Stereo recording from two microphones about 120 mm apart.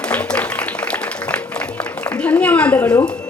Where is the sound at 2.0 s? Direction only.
10° left (ahead or behind).